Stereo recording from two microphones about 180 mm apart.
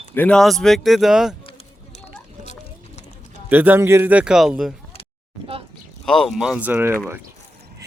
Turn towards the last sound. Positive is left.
turn(degrees=-10)  # may be behind; listen again after turning